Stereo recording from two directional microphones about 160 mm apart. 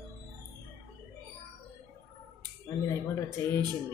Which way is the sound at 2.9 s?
15° left (ahead or behind).